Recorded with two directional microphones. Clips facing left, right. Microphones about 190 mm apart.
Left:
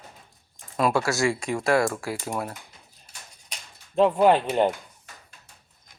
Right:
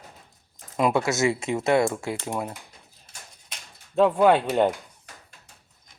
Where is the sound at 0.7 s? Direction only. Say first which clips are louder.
Right 1 dB; 20° right (ahead or behind).